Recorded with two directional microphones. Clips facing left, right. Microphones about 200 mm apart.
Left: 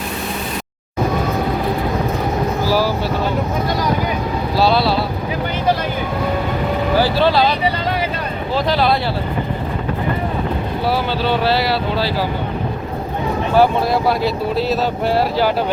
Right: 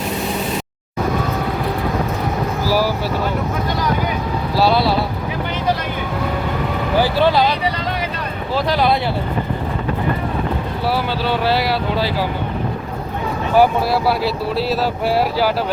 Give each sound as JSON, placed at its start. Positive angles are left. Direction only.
{"t": 2.6, "sound": "vehicle", "side_deg": -10}
{"t": 4.6, "sound": "speech", "side_deg": -15}
{"t": 7.0, "sound": "speech", "side_deg": -15}
{"t": 8.5, "sound": "speech", "side_deg": -15}
{"t": 10.8, "sound": "speech", "side_deg": -10}
{"t": 13.6, "sound": "speech", "side_deg": -5}